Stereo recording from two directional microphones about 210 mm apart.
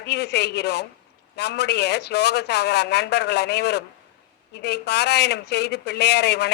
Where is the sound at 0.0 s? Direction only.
50° left (ahead or behind).